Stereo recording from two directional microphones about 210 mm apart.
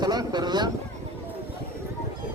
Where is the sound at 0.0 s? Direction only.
20° right (ahead or behind).